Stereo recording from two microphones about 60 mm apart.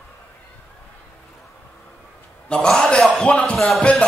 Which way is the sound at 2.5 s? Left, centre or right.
Centre.